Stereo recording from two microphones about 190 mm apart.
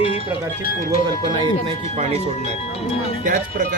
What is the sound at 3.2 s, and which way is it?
Speech, 45° right (ahead or behind).